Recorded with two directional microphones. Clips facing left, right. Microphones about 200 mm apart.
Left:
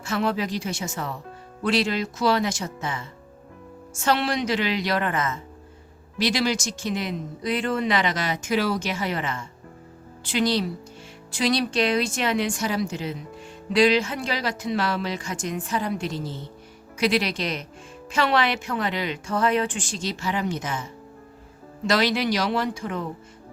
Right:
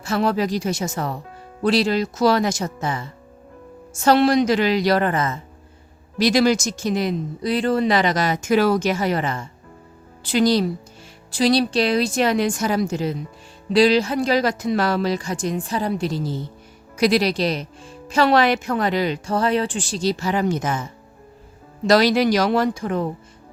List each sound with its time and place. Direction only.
0.0 s speech: 35° right (ahead or behind)